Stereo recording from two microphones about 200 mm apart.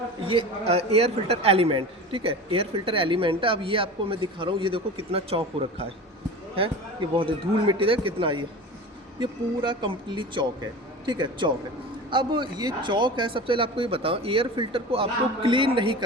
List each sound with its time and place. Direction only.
0.3 s a man's voice: 30° right (ahead or behind)
7.2 s a man's voice: 25° right (ahead or behind)